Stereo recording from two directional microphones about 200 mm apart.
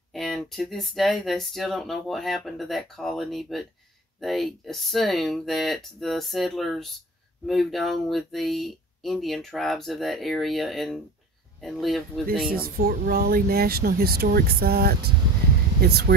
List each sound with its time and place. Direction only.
0.1 s speech: centre (ahead or behind)
12.4 s speech: 50° right (ahead or behind)